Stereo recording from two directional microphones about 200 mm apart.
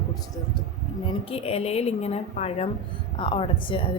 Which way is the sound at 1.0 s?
30° left (ahead or behind).